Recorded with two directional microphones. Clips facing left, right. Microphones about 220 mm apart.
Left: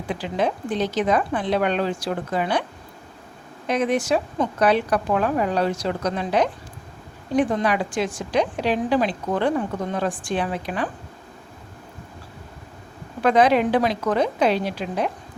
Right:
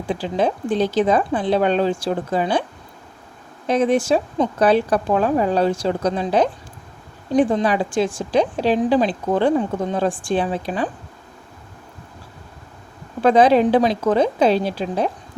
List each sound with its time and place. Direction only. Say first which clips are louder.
0.1 s a woman's voice: right 3 dB; 30° right (ahead or behind)
3.7 s a woman's voice: right 4 dB; 30° right (ahead or behind)
13.2 s a woman's voice: right 4 dB; 30° right (ahead or behind)